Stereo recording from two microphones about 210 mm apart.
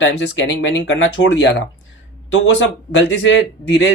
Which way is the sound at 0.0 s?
65° left (ahead or behind).